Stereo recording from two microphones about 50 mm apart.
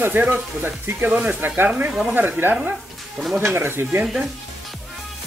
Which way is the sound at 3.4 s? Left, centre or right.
Right.